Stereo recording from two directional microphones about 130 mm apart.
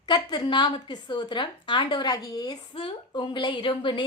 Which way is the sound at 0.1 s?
35° left (ahead or behind).